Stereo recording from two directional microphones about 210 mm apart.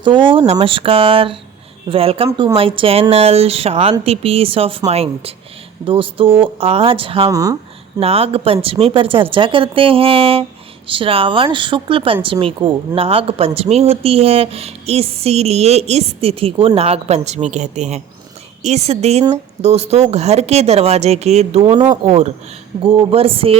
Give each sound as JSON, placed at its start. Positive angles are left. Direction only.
{"t": 0.0, "sound": "speech", "side_deg": -25}
{"t": 7.9, "sound": "speech", "side_deg": -25}
{"t": 21.6, "sound": "speech", "side_deg": -20}